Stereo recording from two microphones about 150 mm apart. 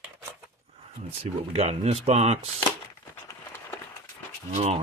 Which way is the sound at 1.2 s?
45° right (ahead or behind).